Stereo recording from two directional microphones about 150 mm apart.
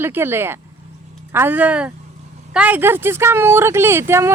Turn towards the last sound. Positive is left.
turn(degrees=-15)  # may be behind; listen again after turning